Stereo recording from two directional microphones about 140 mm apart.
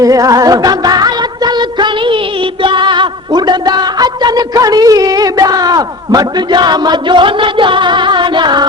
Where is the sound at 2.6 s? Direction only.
35° right (ahead or behind).